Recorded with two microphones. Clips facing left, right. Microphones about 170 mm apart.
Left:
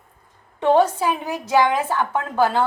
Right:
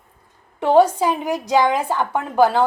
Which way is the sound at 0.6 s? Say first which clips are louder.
Right 2 dB; 10° right (ahead or behind).